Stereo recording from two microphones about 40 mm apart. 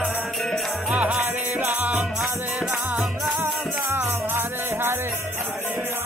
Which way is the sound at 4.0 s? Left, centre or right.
Right.